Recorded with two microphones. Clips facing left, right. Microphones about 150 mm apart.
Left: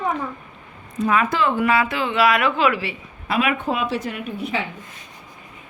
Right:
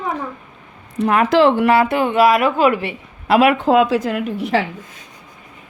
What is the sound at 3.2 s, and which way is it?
A woman's voice, 80° right.